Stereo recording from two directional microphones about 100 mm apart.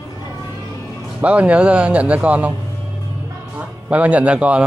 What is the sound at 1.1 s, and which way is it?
Speech, 15° right (ahead or behind).